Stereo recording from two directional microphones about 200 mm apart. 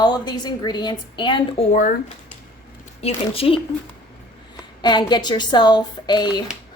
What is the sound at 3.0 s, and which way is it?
A woman's voice, 30° left (ahead or behind).